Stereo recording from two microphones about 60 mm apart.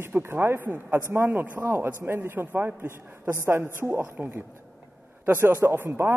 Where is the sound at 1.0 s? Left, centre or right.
Right.